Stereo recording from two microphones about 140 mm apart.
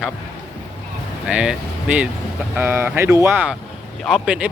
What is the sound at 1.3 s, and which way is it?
Speech, 5° right (ahead or behind).